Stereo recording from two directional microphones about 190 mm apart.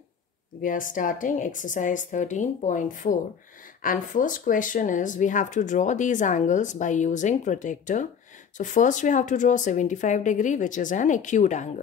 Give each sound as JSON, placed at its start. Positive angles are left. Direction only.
{"t": 0.6, "sound": "speech", "side_deg": 45}